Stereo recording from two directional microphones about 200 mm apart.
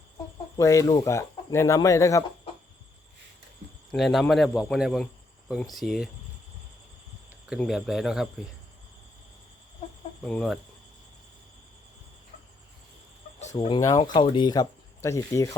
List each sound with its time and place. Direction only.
0.5 s speech: 15° left (ahead or behind)
3.9 s speech: centre (ahead or behind)
7.4 s speech: 5° right (ahead or behind)
10.2 s speech: centre (ahead or behind)
13.4 s chicken: 35° left (ahead or behind)
13.7 s speech: 20° left (ahead or behind)